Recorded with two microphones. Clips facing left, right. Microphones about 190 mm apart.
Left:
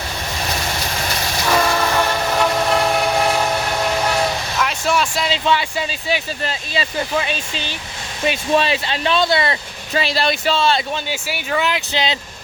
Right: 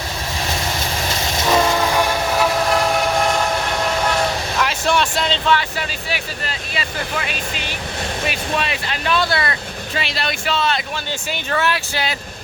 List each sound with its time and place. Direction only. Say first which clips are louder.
1.4 s train: right 1 dB; 20° right (ahead or behind); by 3.4 s 5° left (ahead or behind)
4.1 s vehicle: even; centre (ahead or behind)
5.5 s speech: left 1 dB; 15° left (ahead or behind)
6.7 s speech: left 5 dB; 25° left (ahead or behind)
10.0 s speech: left 6 dB; 35° left (ahead or behind)
11.1 s speech: right 2 dB; 10° left (ahead or behind)